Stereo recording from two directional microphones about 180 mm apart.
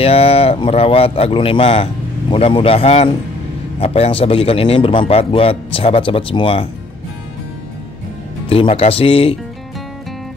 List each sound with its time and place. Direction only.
0.0 s a man's voice: 35° left (ahead or behind)
8.5 s a man's voice: 30° left (ahead or behind)